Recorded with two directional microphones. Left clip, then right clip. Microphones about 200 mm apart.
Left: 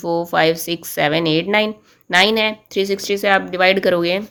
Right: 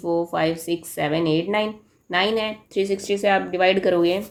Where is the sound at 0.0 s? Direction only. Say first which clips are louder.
Left 6 dB; 40° left (ahead or behind).